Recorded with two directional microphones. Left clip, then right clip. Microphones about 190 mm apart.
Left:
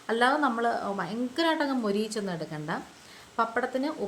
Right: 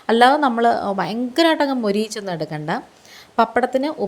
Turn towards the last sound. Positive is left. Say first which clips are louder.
# right 10 dB
turn(degrees=-35)  # may be behind; listen again after turning